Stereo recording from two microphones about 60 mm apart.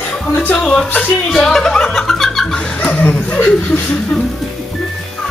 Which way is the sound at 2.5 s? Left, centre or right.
Centre.